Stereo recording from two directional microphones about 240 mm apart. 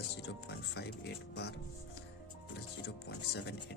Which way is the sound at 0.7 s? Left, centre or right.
Left.